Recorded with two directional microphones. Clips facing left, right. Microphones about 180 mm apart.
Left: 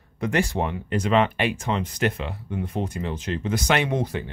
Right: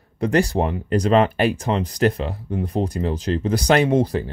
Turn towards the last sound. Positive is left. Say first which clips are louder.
# right 7 dB
turn(degrees=-35)  # may be behind; listen again after turning